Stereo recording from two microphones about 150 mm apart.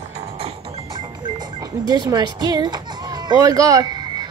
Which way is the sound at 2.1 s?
25° right (ahead or behind).